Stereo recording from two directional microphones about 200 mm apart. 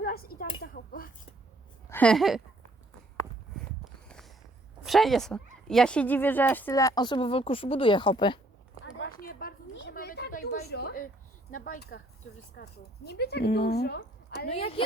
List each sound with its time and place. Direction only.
0.0 s a sound: 50° left (ahead or behind)
1.9 s speech: 5° left (ahead or behind)
4.8 s speech: centre (ahead or behind); by 8.4 s 25° left (ahead or behind)
9.2 s a sound: 50° left (ahead or behind)
9.9 s a woman's voice: 50° left (ahead or behind)
14.5 s a woman's voice: 30° left (ahead or behind)